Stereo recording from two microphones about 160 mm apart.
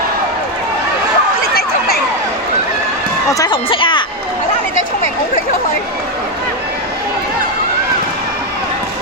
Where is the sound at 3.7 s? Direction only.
30° left (ahead or behind).